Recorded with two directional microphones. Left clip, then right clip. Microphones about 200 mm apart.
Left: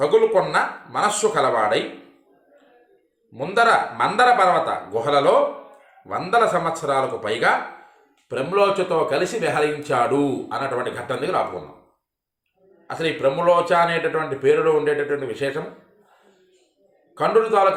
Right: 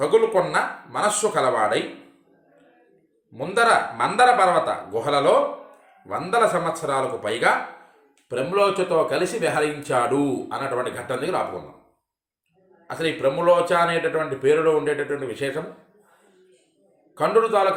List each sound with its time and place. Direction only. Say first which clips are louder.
0.0 s speech: left 2 dB; 5° left (ahead or behind)
3.3 s speech: left 1 dB; 5° left (ahead or behind)
12.9 s speech: left 2 dB; 5° left (ahead or behind)
17.2 s speech: left 1 dB; 5° left (ahead or behind)